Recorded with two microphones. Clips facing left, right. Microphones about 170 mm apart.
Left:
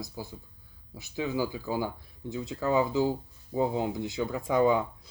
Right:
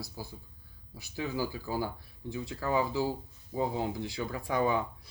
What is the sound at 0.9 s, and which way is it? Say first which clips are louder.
Speech: left 4 dB; 20° left (ahead or behind).